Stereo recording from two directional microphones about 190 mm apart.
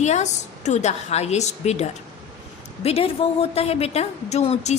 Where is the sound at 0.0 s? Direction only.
35° left (ahead or behind).